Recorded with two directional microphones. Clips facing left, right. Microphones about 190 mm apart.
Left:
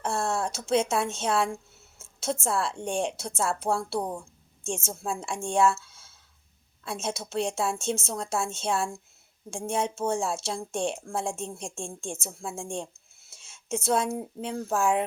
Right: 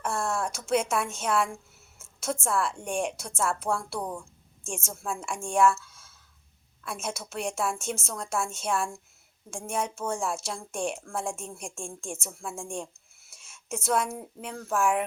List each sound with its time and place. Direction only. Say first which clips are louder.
0.0 s a woman's voice: left 1 dB; 25° left (ahead or behind)